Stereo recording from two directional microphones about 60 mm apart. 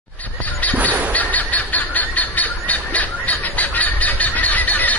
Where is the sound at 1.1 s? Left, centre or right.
Left.